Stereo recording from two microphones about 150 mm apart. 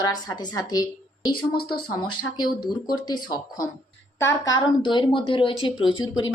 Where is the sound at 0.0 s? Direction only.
25° left (ahead or behind).